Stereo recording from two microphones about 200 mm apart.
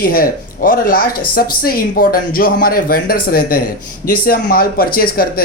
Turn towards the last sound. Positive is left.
turn(degrees=50)  # may be behind; listen again after turning